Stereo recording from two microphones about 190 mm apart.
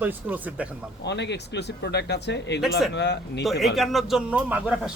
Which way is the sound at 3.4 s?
Centre (ahead or behind).